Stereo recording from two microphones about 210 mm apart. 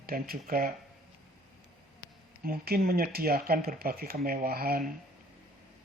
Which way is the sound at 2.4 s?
45° right (ahead or behind).